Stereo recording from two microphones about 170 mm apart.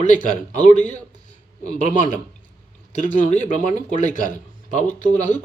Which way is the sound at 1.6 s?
45° left (ahead or behind).